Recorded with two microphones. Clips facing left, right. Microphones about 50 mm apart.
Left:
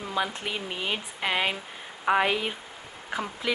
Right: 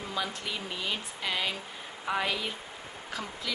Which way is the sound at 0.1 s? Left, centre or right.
Left.